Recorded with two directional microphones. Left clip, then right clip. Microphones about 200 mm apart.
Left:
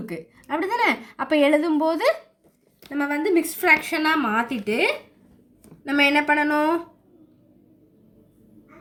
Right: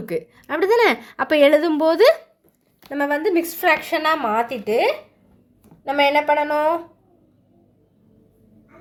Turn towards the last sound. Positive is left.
turn(degrees=-15)  # may be behind; listen again after turning